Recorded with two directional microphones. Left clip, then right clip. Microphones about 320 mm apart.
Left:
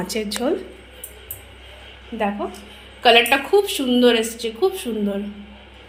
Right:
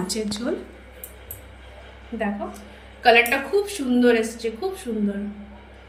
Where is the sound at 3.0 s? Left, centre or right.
Centre.